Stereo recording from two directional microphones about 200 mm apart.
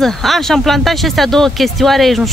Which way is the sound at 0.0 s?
Centre (ahead or behind).